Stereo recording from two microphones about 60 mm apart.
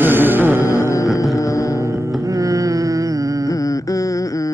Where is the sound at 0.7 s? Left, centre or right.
Left.